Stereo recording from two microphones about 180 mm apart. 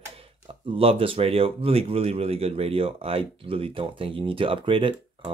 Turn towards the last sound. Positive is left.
turn(degrees=-30)  # may be behind; listen again after turning